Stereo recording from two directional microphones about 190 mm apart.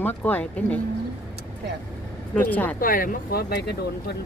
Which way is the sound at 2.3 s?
10° left (ahead or behind).